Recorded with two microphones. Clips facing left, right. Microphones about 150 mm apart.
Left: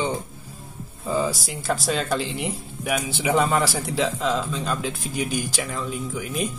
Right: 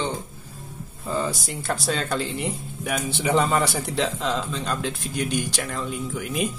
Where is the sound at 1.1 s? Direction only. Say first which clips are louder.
Left 2 dB; 5° left (ahead or behind).